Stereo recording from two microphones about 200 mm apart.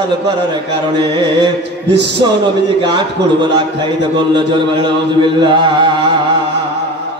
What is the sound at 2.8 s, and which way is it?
Chant, 25° right (ahead or behind).